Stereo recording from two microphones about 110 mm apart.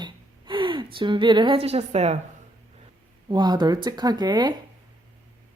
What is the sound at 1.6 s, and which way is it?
Speech, 70° right (ahead or behind).